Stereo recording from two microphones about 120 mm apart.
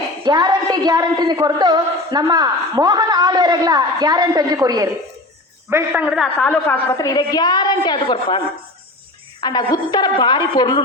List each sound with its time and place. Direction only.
0.3 s a woman's voice: 35° right (ahead or behind)
5.9 s a man's voice: 10° right (ahead or behind)
6.4 s a woman's voice: 10° left (ahead or behind)
6.9 s a woman's voice: 30° left (ahead or behind)
9.4 s a woman's voice: 35° left (ahead or behind)